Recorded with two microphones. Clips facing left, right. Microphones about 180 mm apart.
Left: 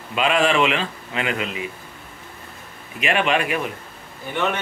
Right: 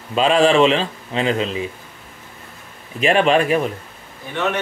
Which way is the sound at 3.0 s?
35° right (ahead or behind).